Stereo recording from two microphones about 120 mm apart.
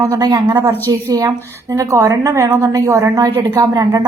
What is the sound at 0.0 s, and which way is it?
A woman's voice, 30° right (ahead or behind).